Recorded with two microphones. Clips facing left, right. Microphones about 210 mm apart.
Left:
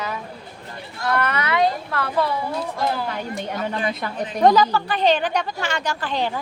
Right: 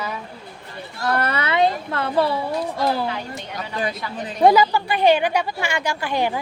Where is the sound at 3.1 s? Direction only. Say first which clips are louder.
Left 3 dB; 50° left (ahead or behind).